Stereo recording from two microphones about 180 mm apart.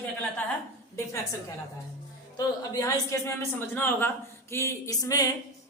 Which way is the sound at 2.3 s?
20° left (ahead or behind).